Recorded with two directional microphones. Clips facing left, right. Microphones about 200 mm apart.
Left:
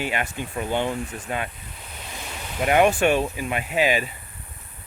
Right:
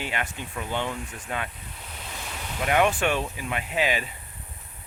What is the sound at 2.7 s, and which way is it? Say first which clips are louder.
Speech: left 5 dB; 10° left (ahead or behind).